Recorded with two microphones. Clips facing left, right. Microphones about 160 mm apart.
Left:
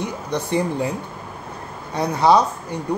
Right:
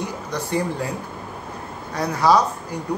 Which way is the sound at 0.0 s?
20° left (ahead or behind).